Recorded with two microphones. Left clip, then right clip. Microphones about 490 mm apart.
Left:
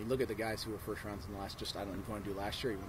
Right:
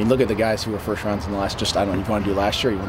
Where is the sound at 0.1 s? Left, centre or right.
Left.